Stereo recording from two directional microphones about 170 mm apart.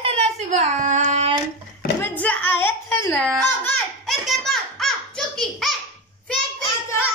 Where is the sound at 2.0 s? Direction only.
10° left (ahead or behind).